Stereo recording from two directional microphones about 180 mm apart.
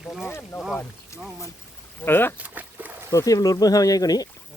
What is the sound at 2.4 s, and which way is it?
Dog, 10° right (ahead or behind).